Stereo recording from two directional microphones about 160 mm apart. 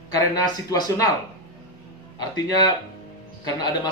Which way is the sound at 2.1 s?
25° left (ahead or behind).